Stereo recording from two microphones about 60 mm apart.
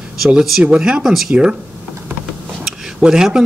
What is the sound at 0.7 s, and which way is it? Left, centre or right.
Speech, centre.